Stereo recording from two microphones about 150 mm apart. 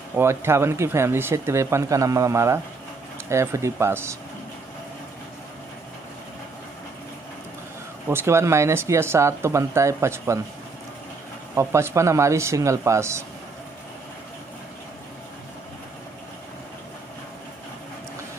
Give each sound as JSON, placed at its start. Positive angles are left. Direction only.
{"t": 0.1, "sound": "speech", "side_deg": -15}
{"t": 8.1, "sound": "speech", "side_deg": -15}
{"t": 11.5, "sound": "speech", "side_deg": -20}